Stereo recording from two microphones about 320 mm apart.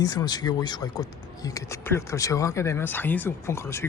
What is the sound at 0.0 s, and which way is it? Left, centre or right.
Speech, centre.